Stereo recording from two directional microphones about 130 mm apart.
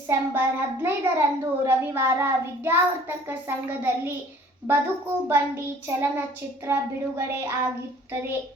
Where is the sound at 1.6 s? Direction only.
15° right (ahead or behind).